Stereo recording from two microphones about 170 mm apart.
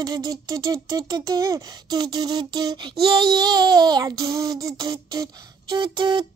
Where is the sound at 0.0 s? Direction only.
20° right (ahead or behind).